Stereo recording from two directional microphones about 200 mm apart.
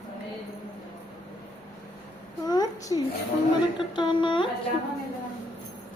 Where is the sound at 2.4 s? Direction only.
20° left (ahead or behind).